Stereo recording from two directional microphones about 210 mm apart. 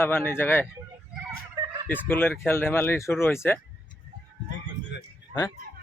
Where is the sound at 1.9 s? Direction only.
10° left (ahead or behind).